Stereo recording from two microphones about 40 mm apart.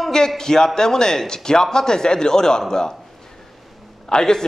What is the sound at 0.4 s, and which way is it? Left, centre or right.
A man's voice, centre.